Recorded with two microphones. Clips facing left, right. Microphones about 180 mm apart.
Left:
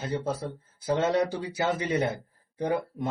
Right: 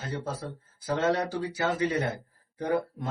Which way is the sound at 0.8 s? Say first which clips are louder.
Left 2 dB; 20° left (ahead or behind).